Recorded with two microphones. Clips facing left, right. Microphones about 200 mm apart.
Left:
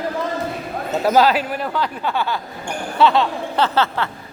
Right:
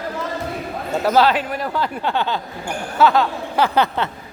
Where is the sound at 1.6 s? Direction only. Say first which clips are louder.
Even; 10° right (ahead or behind).